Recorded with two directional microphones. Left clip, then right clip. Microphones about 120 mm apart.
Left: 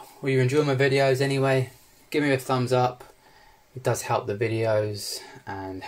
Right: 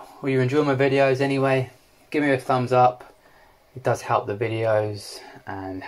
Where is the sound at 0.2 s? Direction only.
15° left (ahead or behind).